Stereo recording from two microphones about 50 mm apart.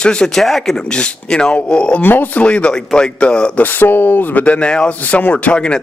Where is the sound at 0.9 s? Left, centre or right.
Centre.